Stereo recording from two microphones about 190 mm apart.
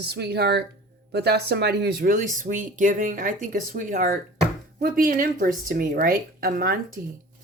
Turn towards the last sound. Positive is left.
turn(degrees=-50)  # may be behind; listen again after turning